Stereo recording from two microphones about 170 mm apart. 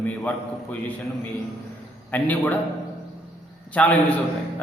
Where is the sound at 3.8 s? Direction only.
10° left (ahead or behind).